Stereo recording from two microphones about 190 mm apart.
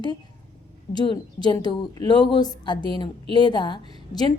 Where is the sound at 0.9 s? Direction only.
20° left (ahead or behind).